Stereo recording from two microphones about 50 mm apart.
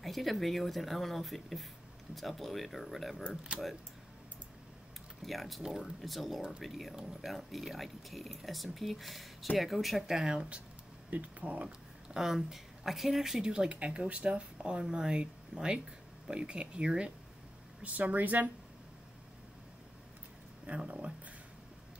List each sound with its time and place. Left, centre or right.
0.0 s speech: centre
5.2 s speech: centre
11.1 s speech: right
11.6 s speech: centre
13.5 s speech: right
17.8 s a woman's voice: right
20.6 s speech: right